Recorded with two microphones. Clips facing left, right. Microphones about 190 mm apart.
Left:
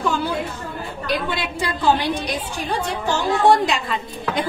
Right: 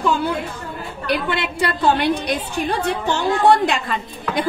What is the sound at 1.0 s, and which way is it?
A woman's voice, 65° right (ahead or behind).